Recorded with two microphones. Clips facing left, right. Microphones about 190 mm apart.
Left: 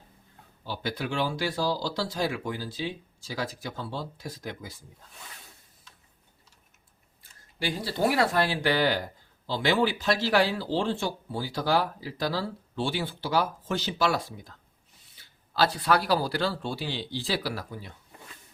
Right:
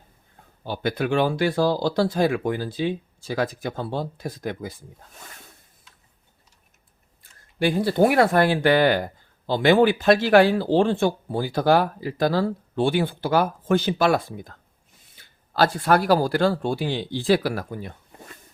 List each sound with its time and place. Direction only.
0.6 s speech: 55° right (ahead or behind)
7.6 s speech: 55° right (ahead or behind)